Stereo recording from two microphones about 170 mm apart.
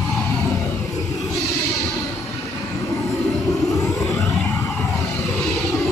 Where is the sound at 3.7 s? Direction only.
20° left (ahead or behind).